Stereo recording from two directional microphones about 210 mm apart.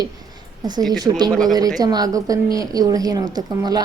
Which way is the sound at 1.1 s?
20° right (ahead or behind).